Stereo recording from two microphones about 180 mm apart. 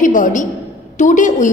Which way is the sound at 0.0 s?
45° left (ahead or behind).